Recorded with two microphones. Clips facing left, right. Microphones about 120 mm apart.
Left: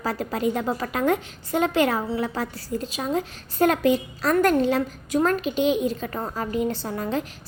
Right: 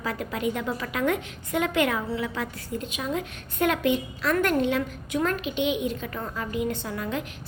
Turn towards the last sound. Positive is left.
turn(degrees=35)  # may be behind; listen again after turning